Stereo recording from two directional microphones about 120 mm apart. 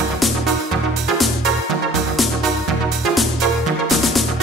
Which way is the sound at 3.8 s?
Centre (ahead or behind).